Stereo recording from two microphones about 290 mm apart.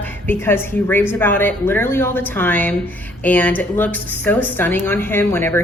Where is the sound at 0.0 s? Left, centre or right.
Centre.